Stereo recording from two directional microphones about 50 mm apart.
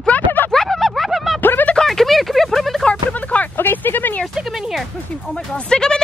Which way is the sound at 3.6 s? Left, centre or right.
Left.